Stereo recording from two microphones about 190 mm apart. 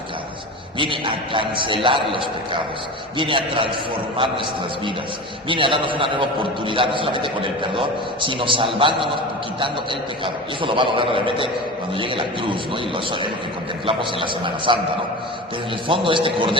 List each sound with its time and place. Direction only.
0.8 s a man's voice: 25° right (ahead or behind)
3.2 s a man's voice: 25° right (ahead or behind)
5.5 s a man's voice: 25° right (ahead or behind)
15.9 s a man's voice: 25° right (ahead or behind)